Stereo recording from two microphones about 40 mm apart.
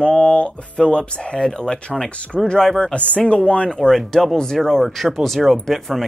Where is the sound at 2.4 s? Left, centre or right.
Centre.